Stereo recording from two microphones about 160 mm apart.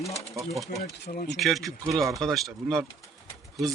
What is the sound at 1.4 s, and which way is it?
Speech, centre (ahead or behind).